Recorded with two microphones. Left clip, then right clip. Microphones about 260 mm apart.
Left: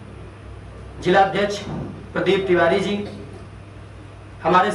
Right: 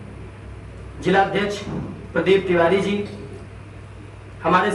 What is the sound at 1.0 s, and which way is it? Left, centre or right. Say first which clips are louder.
A man's voice: left 2 dB; centre.